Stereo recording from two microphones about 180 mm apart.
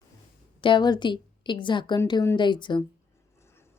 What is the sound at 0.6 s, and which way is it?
Speech, 25° left (ahead or behind).